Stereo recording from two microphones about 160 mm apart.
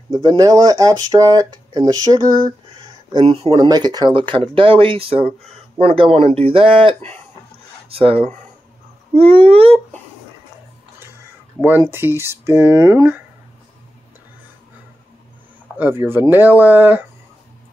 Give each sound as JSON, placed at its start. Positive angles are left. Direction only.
{"t": 0.1, "sound": "speech", "side_deg": -20}
{"t": 3.1, "sound": "speech", "side_deg": -35}
{"t": 11.9, "sound": "speech", "side_deg": -15}
{"t": 15.8, "sound": "speech", "side_deg": -15}